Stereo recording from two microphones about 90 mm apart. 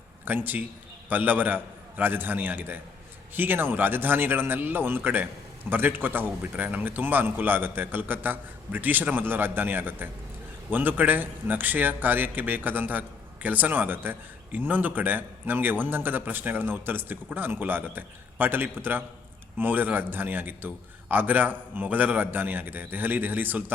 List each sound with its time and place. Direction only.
0.3 s speech: 20° right (ahead or behind)